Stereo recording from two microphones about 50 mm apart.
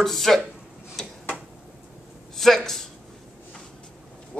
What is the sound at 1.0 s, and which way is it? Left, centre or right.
Tick-tock, centre.